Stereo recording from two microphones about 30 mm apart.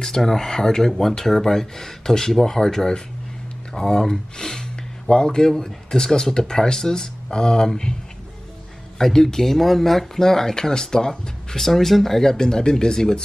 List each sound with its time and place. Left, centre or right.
0.0 s speech: centre
8.9 s speech: centre